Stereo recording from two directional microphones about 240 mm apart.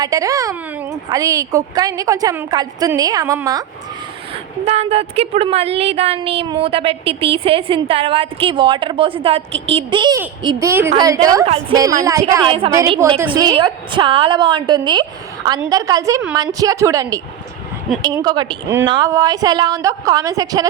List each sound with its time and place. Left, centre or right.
0.0 s speech: centre
4.6 s a woman's voice: right